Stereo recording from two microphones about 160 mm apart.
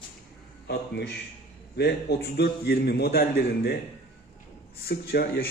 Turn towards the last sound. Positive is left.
turn(degrees=75)  # may be behind; listen again after turning